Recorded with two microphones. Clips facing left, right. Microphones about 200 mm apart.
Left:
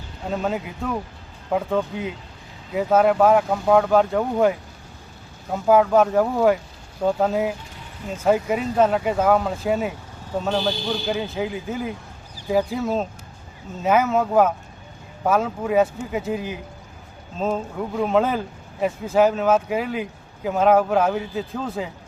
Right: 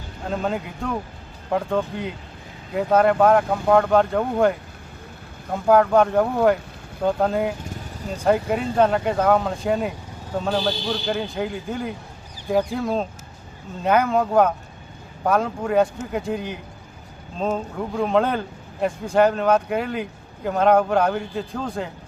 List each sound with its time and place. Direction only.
0.3 s speech: centre (ahead or behind)
7.6 s vehicle: 40° right (ahead or behind)
8.2 s speech: centre (ahead or behind)